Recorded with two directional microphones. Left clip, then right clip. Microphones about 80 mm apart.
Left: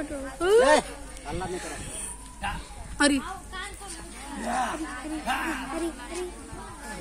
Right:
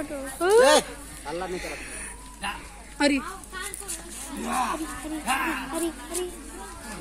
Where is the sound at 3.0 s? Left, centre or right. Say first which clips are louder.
Even; centre.